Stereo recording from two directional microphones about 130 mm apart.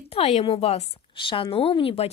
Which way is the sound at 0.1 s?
55° left (ahead or behind).